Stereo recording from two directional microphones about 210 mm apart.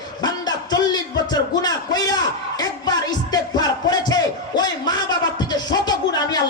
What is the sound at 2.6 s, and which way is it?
Music, 20° left (ahead or behind).